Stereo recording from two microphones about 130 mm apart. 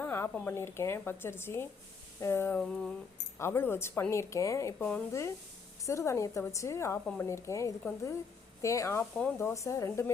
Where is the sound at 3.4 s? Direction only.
20° left (ahead or behind).